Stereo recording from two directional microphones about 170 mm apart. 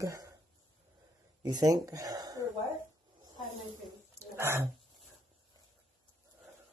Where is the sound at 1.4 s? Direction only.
25° right (ahead or behind).